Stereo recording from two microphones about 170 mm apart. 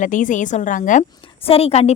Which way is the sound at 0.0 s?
50° left (ahead or behind).